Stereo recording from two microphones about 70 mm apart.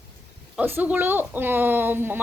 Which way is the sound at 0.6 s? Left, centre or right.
Right.